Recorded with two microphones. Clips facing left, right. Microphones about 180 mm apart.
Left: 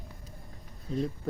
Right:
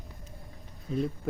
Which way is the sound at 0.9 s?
30° left (ahead or behind).